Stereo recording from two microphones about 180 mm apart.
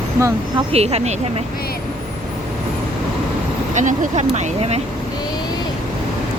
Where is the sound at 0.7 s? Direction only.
35° right (ahead or behind).